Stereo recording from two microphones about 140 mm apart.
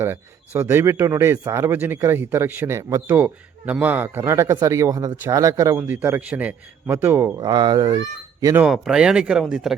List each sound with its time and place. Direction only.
0.0 s speech: 15° right (ahead or behind)
8.6 s speech: 5° right (ahead or behind)